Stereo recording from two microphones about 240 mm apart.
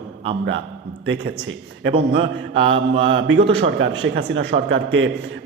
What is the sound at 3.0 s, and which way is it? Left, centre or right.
A man's voice, right.